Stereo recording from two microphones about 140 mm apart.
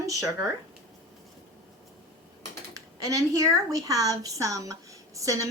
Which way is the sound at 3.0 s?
25° right (ahead or behind).